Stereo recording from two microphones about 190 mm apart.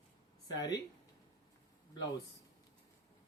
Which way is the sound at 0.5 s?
20° left (ahead or behind).